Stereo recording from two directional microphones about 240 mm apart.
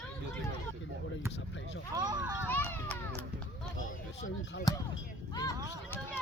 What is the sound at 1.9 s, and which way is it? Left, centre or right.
Speech, centre.